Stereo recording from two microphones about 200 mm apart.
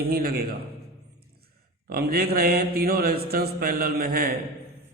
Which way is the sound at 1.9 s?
50° right (ahead or behind).